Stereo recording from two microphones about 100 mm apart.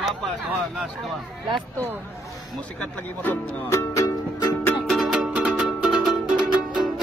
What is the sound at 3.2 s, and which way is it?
Speech, 20° left (ahead or behind).